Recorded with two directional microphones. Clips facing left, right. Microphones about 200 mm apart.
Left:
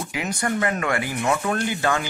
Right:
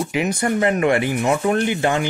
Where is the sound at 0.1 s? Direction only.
20° right (ahead or behind).